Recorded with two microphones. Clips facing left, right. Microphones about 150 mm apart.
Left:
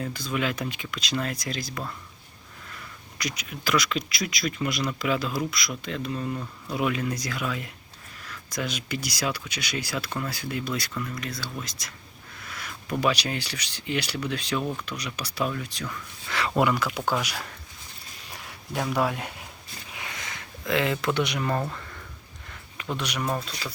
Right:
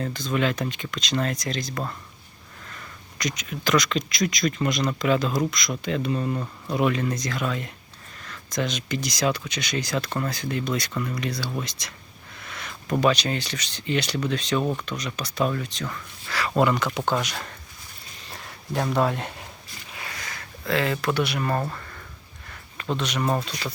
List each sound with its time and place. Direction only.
0.0 s speech: 10° left (ahead or behind)
18.3 s a sound: 10° left (ahead or behind)
21.5 s speech: 5° right (ahead or behind)
23.0 s speech: 10° left (ahead or behind)